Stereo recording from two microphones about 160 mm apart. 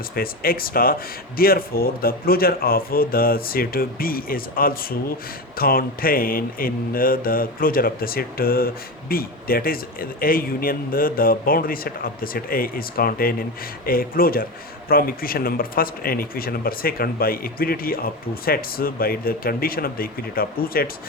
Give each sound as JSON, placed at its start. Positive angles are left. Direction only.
{"t": 0.1, "sound": "speech", "side_deg": 65}
{"t": 5.5, "sound": "mantra", "side_deg": 65}
{"t": 14.8, "sound": "speech", "side_deg": 65}